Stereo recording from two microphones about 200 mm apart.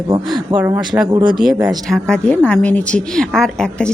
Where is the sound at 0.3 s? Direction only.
5° right (ahead or behind).